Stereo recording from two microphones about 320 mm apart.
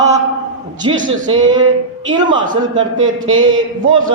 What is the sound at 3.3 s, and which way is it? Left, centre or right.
Speech, right.